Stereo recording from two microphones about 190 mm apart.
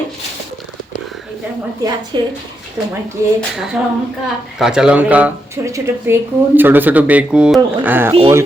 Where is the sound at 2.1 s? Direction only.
25° right (ahead or behind).